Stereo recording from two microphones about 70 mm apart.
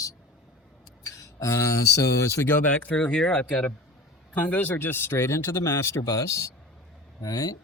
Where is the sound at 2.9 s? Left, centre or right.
Centre; by 6.5 s left.